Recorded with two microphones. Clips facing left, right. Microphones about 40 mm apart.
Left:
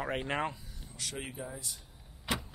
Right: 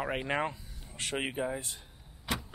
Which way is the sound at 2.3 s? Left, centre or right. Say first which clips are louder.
Even; centre.